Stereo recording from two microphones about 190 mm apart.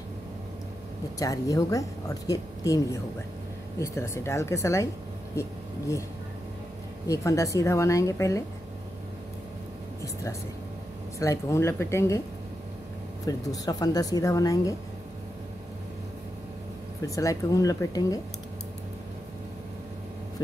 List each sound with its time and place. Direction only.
1.2 s a woman's voice: 20° left (ahead or behind)
7.1 s a woman's voice: 15° left (ahead or behind)
11.1 s a woman's voice: 15° left (ahead or behind)
13.2 s speech: 20° left (ahead or behind)
17.0 s a woman's voice: 15° left (ahead or behind)